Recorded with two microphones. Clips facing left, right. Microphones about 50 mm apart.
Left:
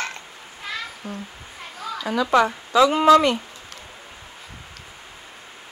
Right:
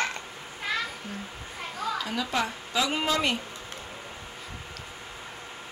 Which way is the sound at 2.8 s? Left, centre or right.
Left.